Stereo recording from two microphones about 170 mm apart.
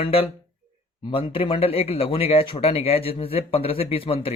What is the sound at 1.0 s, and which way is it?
Speech, 30° left (ahead or behind).